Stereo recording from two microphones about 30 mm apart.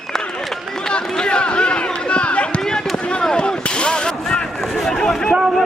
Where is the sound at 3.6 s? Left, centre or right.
Left.